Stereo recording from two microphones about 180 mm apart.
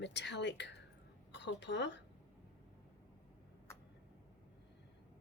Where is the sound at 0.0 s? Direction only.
75° left (ahead or behind).